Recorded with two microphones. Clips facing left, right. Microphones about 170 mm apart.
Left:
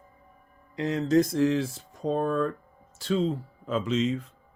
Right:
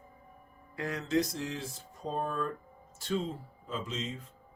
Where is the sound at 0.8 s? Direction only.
25° left (ahead or behind).